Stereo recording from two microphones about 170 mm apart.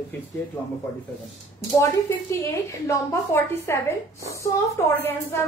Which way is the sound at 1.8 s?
15° left (ahead or behind).